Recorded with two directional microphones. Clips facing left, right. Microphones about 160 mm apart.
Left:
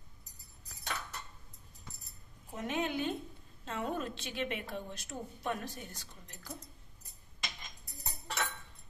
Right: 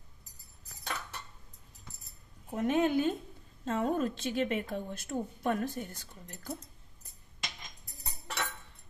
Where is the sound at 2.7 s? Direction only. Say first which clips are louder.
Right 7 dB; 45° right (ahead or behind).